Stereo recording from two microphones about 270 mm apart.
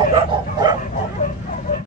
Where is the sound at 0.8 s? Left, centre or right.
Left.